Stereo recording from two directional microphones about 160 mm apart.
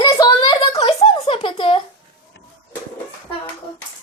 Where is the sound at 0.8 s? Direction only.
35° left (ahead or behind).